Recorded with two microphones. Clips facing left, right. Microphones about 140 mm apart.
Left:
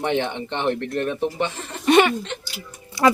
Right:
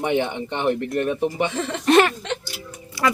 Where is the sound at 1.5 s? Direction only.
90° right.